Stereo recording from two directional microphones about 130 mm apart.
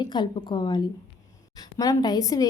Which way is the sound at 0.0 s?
35° left (ahead or behind).